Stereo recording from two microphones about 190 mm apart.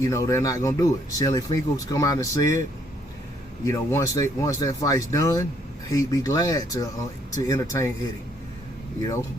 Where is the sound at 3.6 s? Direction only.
15° left (ahead or behind).